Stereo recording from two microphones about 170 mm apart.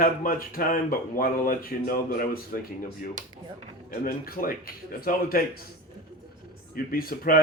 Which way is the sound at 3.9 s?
60° left (ahead or behind).